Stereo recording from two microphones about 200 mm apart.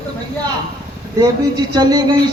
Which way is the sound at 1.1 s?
20° right (ahead or behind).